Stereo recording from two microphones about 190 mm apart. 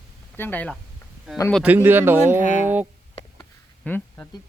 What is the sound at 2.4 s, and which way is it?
Speech, 40° left (ahead or behind).